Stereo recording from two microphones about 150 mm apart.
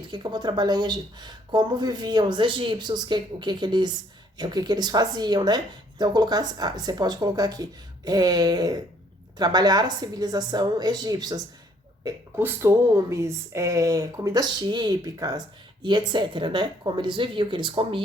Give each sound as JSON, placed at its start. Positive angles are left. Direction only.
{"t": 0.1, "sound": "speech", "side_deg": -30}